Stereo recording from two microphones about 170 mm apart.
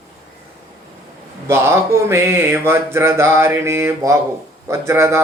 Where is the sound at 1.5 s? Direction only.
15° right (ahead or behind).